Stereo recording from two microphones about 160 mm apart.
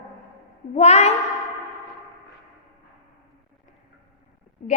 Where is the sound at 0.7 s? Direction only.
45° left (ahead or behind).